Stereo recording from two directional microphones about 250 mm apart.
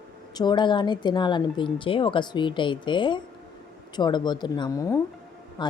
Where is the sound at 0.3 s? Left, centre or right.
Centre.